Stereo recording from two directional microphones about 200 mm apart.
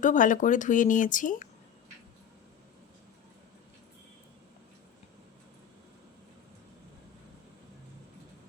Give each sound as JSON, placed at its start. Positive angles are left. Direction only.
{"t": 0.0, "sound": "speech", "side_deg": 40}